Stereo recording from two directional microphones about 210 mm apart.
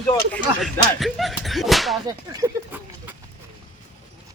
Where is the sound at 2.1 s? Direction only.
15° right (ahead or behind).